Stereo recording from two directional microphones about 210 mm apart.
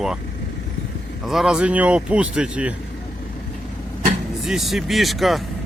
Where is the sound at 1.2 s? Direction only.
Centre (ahead or behind).